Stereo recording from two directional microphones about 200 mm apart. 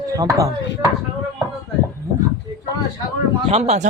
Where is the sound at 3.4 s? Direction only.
35° right (ahead or behind).